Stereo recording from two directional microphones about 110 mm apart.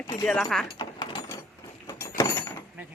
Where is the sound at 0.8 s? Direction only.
45° left (ahead or behind).